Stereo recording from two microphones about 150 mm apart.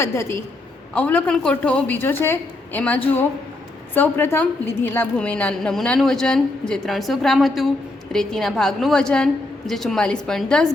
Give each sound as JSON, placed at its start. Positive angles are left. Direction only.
{"t": 0.0, "sound": "a woman's voice", "side_deg": 15}